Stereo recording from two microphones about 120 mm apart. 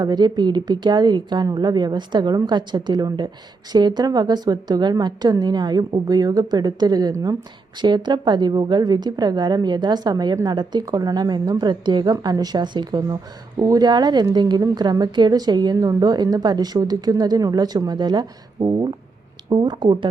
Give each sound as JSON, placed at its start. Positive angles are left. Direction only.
{"t": 0.0, "sound": "a woman's voice", "side_deg": -35}